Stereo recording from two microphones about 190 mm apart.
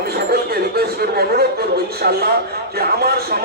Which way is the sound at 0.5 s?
55° right (ahead or behind).